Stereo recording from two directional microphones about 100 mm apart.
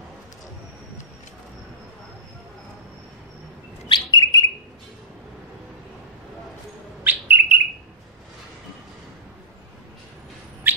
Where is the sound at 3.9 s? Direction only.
40° left (ahead or behind).